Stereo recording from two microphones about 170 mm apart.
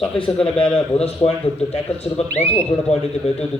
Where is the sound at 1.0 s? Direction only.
35° left (ahead or behind).